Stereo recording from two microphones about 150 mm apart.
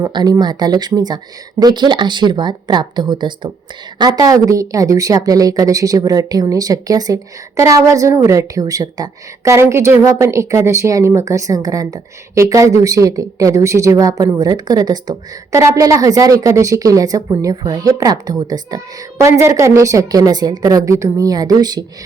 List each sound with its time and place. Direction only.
0.0 s a woman's voice: 25° right (ahead or behind)